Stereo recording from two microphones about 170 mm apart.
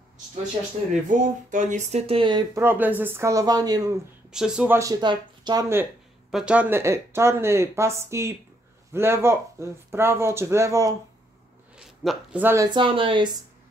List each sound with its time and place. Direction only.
1.1 s speech: 45° right (ahead or behind); by 2.4 s 30° right (ahead or behind)
2.5 s speech: 15° right (ahead or behind)
4.3 s speech: 5° right (ahead or behind)
4.7 s speech: 20° right (ahead or behind)
6.3 s speech: 5° right (ahead or behind)
11.7 s a sound: centre (ahead or behind)
12.4 s speech: 15° right (ahead or behind)
12.6 s speech: 30° right (ahead or behind)